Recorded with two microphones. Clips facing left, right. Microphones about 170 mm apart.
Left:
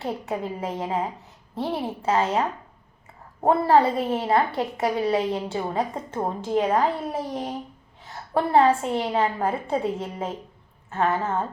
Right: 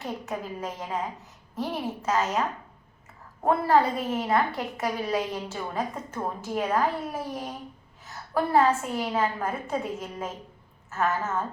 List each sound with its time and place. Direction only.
0.0 s a woman's voice: 30° left (ahead or behind)
3.4 s a woman's voice: 30° left (ahead or behind)